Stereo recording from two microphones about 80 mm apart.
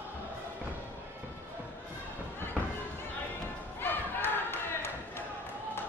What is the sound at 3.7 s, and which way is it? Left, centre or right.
Crowd, left.